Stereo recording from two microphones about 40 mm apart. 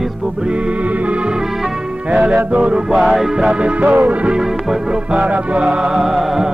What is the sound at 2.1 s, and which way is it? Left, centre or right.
Music, right.